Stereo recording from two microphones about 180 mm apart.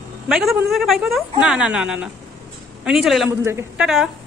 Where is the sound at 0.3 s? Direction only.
Centre (ahead or behind).